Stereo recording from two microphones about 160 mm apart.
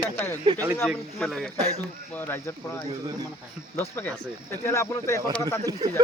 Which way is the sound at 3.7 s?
15° left (ahead or behind).